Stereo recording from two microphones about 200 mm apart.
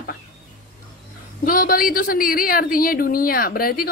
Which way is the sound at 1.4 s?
45° left (ahead or behind).